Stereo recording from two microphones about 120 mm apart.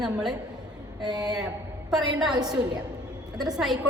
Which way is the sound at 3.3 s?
35° right (ahead or behind).